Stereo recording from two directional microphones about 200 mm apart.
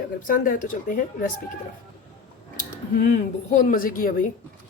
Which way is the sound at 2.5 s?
45° left (ahead or behind).